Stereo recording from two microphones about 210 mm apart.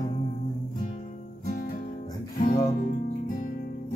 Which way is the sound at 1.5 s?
40° left (ahead or behind).